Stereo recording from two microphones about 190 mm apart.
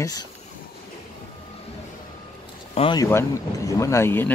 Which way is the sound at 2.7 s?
25° left (ahead or behind).